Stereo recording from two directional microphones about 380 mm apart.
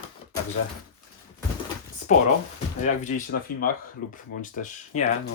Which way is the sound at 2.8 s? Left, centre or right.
Centre.